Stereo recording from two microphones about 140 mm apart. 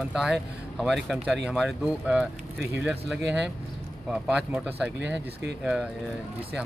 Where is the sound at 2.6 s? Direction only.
20° right (ahead or behind).